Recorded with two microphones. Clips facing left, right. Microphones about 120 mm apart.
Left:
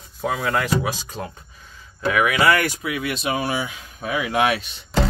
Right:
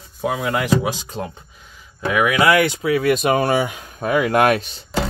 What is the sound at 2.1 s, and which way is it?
Speech, 20° right (ahead or behind).